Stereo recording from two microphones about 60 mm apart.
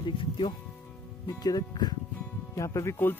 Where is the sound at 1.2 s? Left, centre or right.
Left.